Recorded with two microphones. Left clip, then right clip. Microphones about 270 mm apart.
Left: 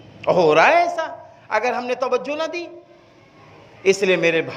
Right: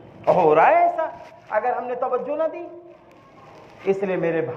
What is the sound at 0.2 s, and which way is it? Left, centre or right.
A man's voice, left.